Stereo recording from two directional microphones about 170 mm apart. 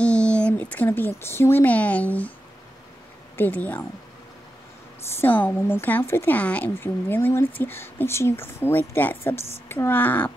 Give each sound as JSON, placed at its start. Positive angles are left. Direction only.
{"t": 0.0, "sound": "speech", "side_deg": 5}
{"t": 3.3, "sound": "speech", "side_deg": 10}
{"t": 5.1, "sound": "speech", "side_deg": 10}